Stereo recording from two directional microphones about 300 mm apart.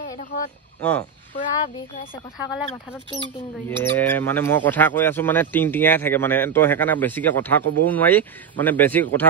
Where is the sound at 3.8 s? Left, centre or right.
Centre.